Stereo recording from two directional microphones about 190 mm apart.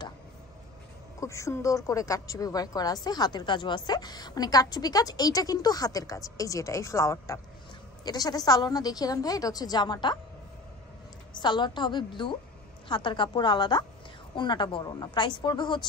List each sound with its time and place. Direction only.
1.2 s a woman's voice: 15° left (ahead or behind)
11.3 s a woman's voice: 25° left (ahead or behind)